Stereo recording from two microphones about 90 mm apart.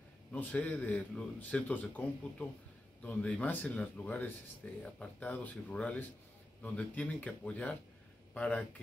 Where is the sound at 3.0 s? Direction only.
15° left (ahead or behind).